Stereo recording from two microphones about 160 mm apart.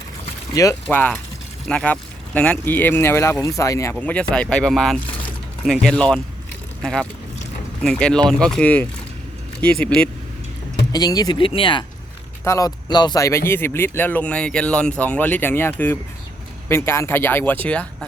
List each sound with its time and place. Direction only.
0.5 s speech: 20° left (ahead or behind)
4.0 s speech: 10° left (ahead or behind)
10.9 s speech: 25° left (ahead or behind)
12.5 s speech: 20° left (ahead or behind)